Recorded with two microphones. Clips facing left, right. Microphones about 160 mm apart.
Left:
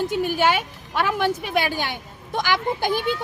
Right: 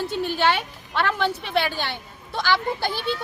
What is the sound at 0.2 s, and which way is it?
A woman's voice, 10° left (ahead or behind).